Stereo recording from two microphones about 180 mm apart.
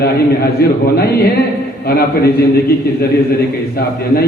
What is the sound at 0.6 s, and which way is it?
A man's voice, 55° left (ahead or behind).